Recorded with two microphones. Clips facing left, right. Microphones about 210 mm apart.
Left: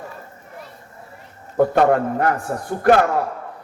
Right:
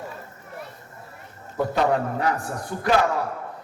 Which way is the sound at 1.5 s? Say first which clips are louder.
Left 6 dB; 55° left (ahead or behind).